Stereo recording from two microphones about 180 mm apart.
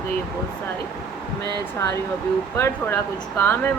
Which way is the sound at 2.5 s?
15° left (ahead or behind).